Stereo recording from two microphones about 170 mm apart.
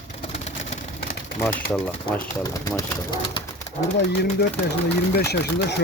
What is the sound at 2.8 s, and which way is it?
Speech, 25° left (ahead or behind).